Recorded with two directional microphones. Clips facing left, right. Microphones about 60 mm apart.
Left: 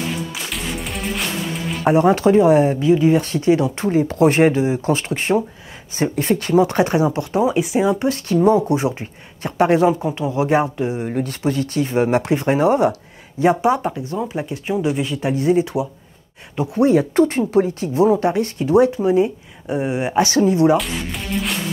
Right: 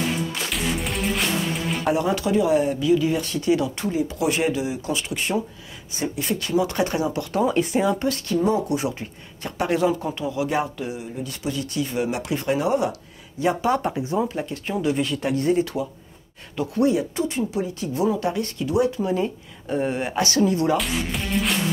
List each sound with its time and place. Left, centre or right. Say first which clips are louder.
0.3 s music: right 1 dB; centre
1.9 s speech: left 9 dB; left
7.4 s speech: left 3 dB; centre
8.5 s speech: left 9 dB; left
11.0 s speech: left 9 dB; left
13.9 s speech: right 1 dB; centre
14.3 s speech: left 4 dB; centre
16.5 s speech: left 4 dB; left
16.9 s speech: left 9 dB; left
20.7 s music: left 4 dB; centre